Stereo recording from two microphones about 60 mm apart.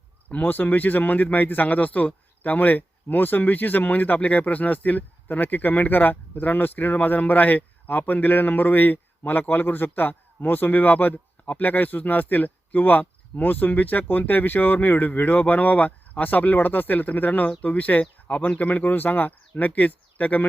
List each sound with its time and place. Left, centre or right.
0.3 s speech: left